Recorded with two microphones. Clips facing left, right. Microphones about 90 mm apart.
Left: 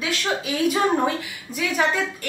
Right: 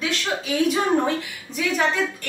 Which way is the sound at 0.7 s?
5° left (ahead or behind).